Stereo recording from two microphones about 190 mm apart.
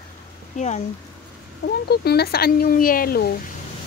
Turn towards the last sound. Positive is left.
turn(degrees=50)  # may be behind; listen again after turning